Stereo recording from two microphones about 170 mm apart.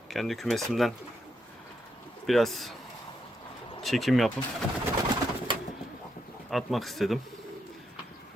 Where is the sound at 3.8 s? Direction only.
Centre (ahead or behind).